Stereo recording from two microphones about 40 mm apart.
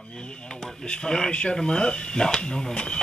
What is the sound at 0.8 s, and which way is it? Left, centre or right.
Speech, left.